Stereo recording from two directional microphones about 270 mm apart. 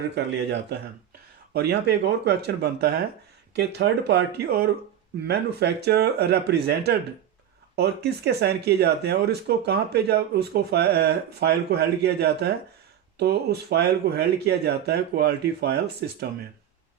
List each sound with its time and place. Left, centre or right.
1.5 s speech: right
7.8 s speech: right